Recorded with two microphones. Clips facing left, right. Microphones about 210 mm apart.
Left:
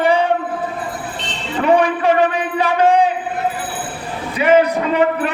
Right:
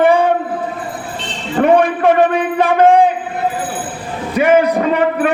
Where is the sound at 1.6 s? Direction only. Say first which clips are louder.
Right 3 dB; 50° right (ahead or behind).